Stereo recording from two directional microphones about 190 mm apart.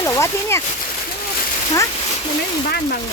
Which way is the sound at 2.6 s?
50° left (ahead or behind).